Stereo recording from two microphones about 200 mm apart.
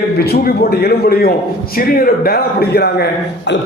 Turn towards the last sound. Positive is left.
turn(degrees=55)  # may be behind; listen again after turning